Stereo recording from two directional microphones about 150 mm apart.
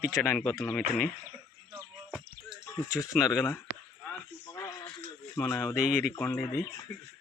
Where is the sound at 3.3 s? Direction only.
15° left (ahead or behind).